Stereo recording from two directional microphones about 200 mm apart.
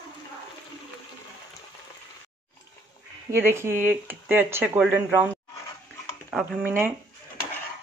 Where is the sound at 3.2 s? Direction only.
10° right (ahead or behind).